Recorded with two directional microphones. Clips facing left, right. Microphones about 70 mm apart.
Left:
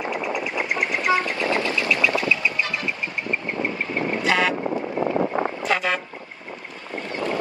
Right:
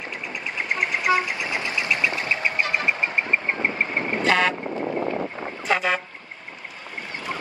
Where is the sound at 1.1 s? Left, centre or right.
Centre; by 2.7 s right.